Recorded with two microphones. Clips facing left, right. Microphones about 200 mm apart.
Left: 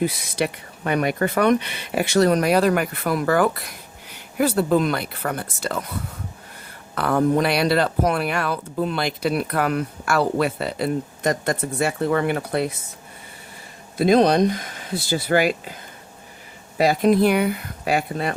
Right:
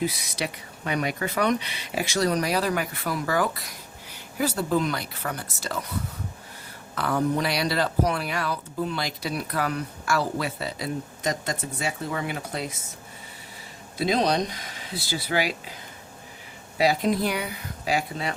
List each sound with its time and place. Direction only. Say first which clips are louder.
0.0 s speech: left 6 dB; 55° left (ahead or behind)
6.9 s speech: left 6 dB; 55° left (ahead or behind)
13.9 s speech: left 7 dB; 50° left (ahead or behind)
16.7 s speech: left 5 dB; 50° left (ahead or behind)